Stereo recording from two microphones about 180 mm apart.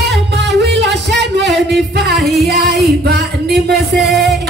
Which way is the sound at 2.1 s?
Centre (ahead or behind).